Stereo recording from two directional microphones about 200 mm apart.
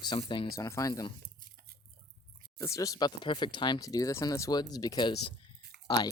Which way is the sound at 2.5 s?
15° left (ahead or behind).